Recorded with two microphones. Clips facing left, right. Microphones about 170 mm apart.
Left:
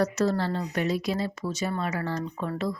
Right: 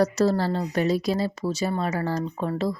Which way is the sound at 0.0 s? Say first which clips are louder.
Right 4 dB; 35° right (ahead or behind).